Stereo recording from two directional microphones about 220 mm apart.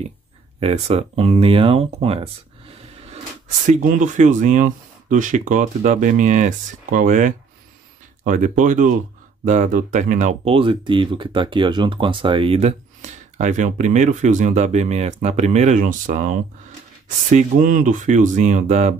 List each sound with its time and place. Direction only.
0.6 s speech: 25° right (ahead or behind)